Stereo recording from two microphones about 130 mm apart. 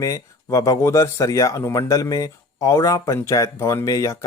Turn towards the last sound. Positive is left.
turn(degrees=25)  # may be behind; listen again after turning